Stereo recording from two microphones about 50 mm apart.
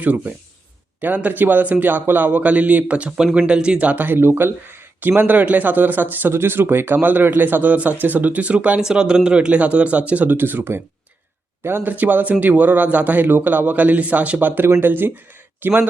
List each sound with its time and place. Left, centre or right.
0.0 s speech: right
3.9 s speech: right
4.2 s speech: right
4.9 s speech: right
6.3 s speech: right
8.8 s speech: centre
10.2 s speech: right
11.8 s speech: right